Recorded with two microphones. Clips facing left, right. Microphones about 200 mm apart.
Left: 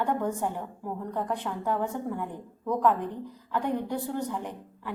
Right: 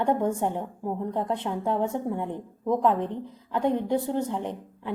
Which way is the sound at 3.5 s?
20° right (ahead or behind).